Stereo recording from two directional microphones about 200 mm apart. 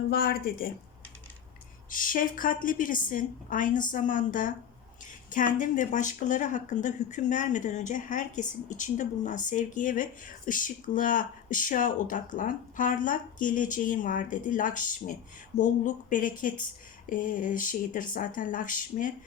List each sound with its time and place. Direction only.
0.1 s speech: 50° left (ahead or behind)
1.9 s speech: 45° left (ahead or behind)